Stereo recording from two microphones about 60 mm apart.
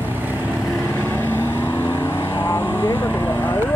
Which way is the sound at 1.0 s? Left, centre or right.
Left.